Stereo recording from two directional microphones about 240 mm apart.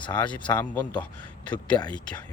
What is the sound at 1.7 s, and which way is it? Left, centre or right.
Speech, centre.